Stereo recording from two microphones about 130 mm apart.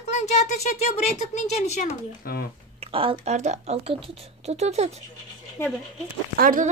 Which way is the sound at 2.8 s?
45° right (ahead or behind).